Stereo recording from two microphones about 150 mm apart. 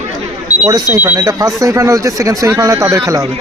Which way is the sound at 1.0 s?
20° right (ahead or behind).